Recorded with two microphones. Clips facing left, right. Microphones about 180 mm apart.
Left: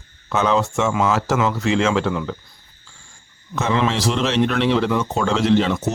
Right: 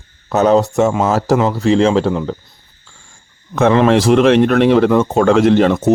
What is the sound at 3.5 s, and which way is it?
Speech, 55° right (ahead or behind).